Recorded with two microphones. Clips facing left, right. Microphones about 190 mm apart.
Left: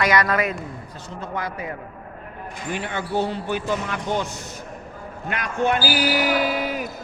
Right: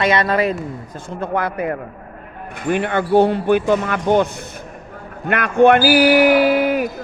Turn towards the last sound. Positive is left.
turn(degrees=-60)  # may be behind; listen again after turning